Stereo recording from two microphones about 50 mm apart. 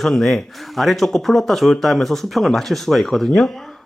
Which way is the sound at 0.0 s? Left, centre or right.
Centre.